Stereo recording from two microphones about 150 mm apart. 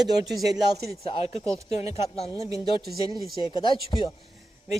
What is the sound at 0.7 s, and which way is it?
Speech, 90° right.